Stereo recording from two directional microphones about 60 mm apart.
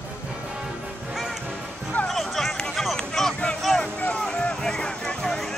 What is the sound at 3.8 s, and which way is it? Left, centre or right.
Music, left.